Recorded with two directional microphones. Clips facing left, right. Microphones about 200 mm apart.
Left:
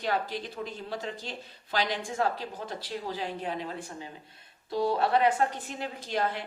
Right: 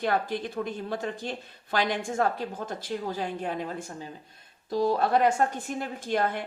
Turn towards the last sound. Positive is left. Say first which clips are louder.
# right 3 dB
turn(degrees=-50)  # may be behind; listen again after turning